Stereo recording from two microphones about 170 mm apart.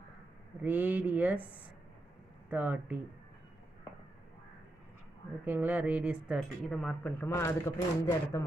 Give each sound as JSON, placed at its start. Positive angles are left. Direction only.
{"t": 0.6, "sound": "speech", "side_deg": -10}
{"t": 2.5, "sound": "speech", "side_deg": -10}
{"t": 5.4, "sound": "speech", "side_deg": -10}
{"t": 7.2, "sound": "a man's voice", "side_deg": 20}